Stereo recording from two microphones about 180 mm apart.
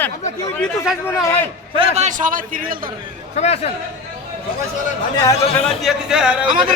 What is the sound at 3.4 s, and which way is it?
Speech, 35° left (ahead or behind).